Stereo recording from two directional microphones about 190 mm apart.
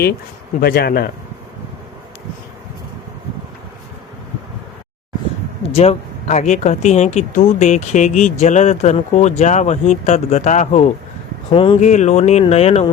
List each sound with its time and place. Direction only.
0.6 s a man's voice: 55° left (ahead or behind)
5.7 s speech: 35° left (ahead or behind)